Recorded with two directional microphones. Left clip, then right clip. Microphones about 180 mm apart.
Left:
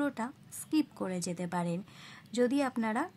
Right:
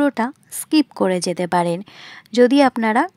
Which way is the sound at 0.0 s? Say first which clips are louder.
Right 16 dB; 45° right (ahead or behind).